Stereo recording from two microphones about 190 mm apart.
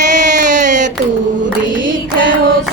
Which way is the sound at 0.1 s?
40° right (ahead or behind).